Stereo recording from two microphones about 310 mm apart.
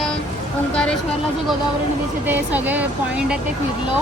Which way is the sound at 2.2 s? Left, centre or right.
Centre.